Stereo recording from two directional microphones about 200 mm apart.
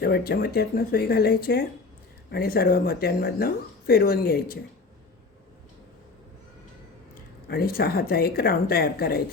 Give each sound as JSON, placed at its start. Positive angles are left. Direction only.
{"t": 0.0, "sound": "speech", "side_deg": 50}
{"t": 7.4, "sound": "speech", "side_deg": 50}